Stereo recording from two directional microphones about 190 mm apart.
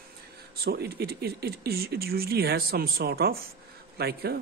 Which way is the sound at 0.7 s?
55° right (ahead or behind).